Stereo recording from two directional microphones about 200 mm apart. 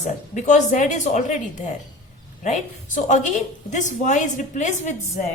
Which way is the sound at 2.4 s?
35° left (ahead or behind).